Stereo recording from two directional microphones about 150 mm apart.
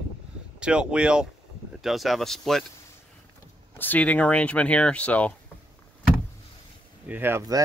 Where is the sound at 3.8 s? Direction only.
10° left (ahead or behind).